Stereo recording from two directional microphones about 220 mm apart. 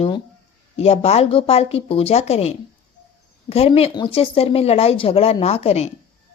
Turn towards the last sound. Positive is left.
turn(degrees=30)  # may be behind; listen again after turning